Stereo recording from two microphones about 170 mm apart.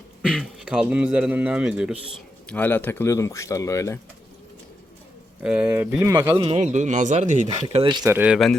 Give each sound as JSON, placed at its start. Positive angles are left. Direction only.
{"t": 0.2, "sound": "speech", "side_deg": -5}
{"t": 2.5, "sound": "speech", "side_deg": 10}
{"t": 5.4, "sound": "speech", "side_deg": -5}
{"t": 6.2, "sound": "a man's voice", "side_deg": -25}
{"t": 6.6, "sound": "speech", "side_deg": -45}
{"t": 8.1, "sound": "speech", "side_deg": -5}